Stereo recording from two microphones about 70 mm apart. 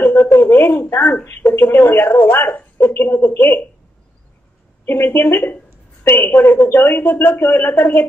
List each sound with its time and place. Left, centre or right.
0.0 s a sound: left
1.2 s speech: left
4.8 s a man's voice: left